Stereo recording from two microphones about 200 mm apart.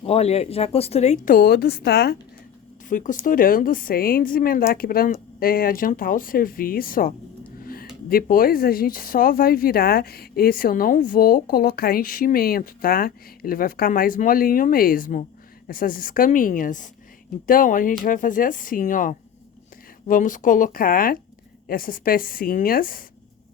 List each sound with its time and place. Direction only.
0.0 s speech: 30° left (ahead or behind); by 2.1 s 55° left (ahead or behind)
2.9 s speech: 40° left (ahead or behind)
7.6 s a sound: 45° left (ahead or behind)
8.1 s speech: 45° left (ahead or behind)